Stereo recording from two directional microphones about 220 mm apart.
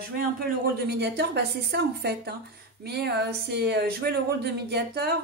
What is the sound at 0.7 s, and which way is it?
Speech, 50° right (ahead or behind).